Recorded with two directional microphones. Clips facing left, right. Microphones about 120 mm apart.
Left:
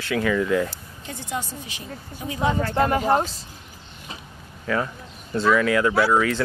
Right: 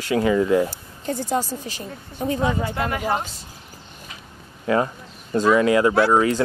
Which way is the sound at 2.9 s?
35° left (ahead or behind).